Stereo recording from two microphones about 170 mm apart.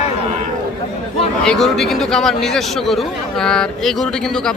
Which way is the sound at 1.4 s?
Centre (ahead or behind).